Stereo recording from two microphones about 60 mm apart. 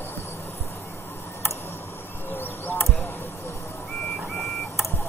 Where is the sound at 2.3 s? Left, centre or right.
Left.